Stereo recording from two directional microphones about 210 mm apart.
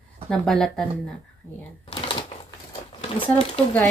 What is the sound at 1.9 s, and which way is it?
Typewriter, 20° left (ahead or behind).